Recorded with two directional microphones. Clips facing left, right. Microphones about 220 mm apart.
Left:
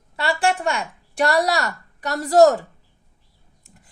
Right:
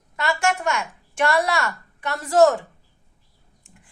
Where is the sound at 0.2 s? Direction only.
35° left (ahead or behind).